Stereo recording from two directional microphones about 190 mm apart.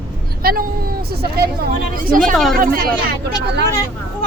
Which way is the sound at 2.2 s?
Centre (ahead or behind).